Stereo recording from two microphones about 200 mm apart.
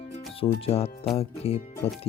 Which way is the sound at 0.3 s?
30° left (ahead or behind).